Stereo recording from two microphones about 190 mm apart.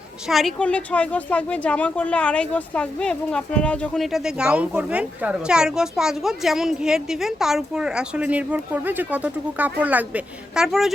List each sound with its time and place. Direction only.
0.3 s a woman's voice: centre (ahead or behind)